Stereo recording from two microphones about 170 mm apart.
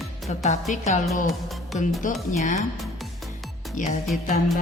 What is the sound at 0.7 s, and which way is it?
Speech, 45° left (ahead or behind).